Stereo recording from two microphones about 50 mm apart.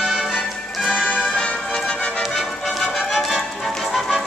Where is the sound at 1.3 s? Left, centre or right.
Centre.